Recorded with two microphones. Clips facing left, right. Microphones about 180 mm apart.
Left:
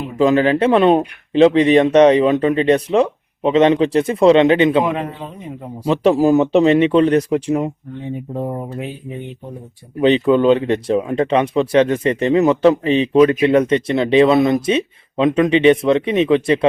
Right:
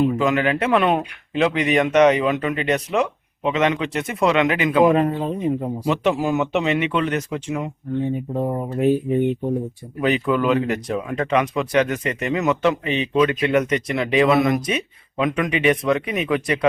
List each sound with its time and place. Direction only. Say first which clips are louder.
0.2 s speech: left 6 dB; 30° left (ahead or behind)
4.9 s a man's voice: right 5 dB; 45° right (ahead or behind)
5.8 s speech: left 8 dB; 35° left (ahead or behind)
10.0 s speech: left 7 dB; 25° left (ahead or behind)